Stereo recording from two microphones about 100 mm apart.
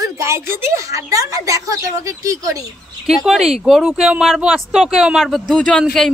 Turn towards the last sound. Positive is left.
turn(degrees=5)  # may be behind; listen again after turning